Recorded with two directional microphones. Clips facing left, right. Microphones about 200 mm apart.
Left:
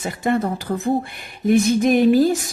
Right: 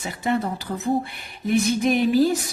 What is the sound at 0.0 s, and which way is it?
Speech, 50° left (ahead or behind).